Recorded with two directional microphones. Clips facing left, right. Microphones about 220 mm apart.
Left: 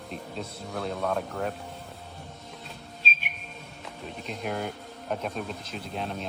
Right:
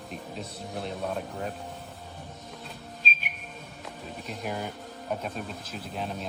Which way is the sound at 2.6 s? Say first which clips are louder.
Right 1 dB; centre (ahead or behind).